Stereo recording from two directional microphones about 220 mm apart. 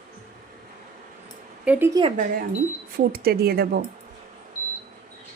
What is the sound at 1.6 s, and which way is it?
Speech, 5° right (ahead or behind).